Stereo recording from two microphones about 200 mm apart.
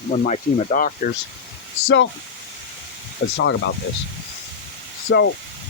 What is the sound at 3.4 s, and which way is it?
Speech, 65° left (ahead or behind).